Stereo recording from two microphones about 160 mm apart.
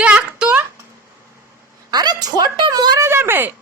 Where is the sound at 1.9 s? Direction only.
25° right (ahead or behind).